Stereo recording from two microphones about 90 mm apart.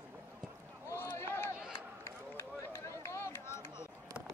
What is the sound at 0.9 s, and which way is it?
Run, 25° left (ahead or behind).